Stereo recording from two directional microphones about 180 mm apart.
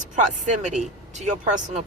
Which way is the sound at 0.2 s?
40° right (ahead or behind).